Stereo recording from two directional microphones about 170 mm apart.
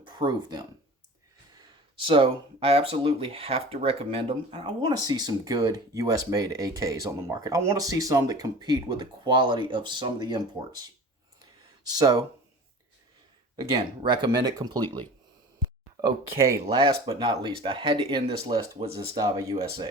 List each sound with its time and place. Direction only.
0.2 s speech: 25° right (ahead or behind)
11.6 s a sound: 20° right (ahead or behind)
13.6 s speech: 25° right (ahead or behind)
14.8 s speech: 10° left (ahead or behind)
16.0 s speech: 20° right (ahead or behind)
16.6 s speech: 30° right (ahead or behind)